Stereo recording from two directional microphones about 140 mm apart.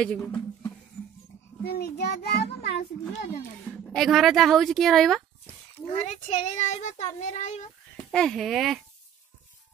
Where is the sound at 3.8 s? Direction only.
Centre (ahead or behind).